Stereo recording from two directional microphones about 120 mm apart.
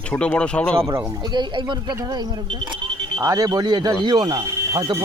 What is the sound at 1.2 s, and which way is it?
Speech, 40° right (ahead or behind).